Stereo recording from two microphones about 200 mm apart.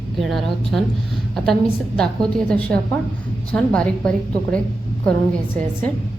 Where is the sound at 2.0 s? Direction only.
5° left (ahead or behind).